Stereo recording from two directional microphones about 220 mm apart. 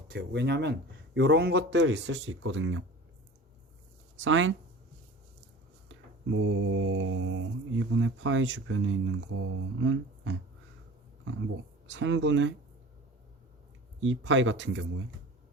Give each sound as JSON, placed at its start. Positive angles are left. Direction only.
{"t": 0.1, "sound": "speech", "side_deg": -50}
{"t": 4.2, "sound": "mantra", "side_deg": -60}
{"t": 5.9, "sound": "mantra", "side_deg": -60}
{"t": 11.9, "sound": "mantra", "side_deg": -60}
{"t": 14.0, "sound": "mantra", "side_deg": -60}